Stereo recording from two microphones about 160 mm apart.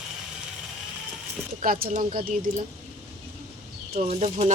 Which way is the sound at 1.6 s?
65° right (ahead or behind).